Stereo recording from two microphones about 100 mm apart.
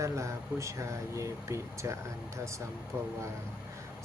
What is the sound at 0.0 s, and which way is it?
Speech, 30° right (ahead or behind).